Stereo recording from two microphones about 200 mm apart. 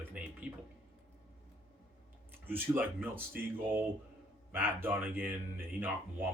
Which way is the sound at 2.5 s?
10° right (ahead or behind).